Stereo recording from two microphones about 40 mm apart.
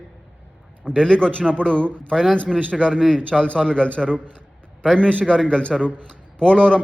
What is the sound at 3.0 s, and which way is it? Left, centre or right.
Speech, centre.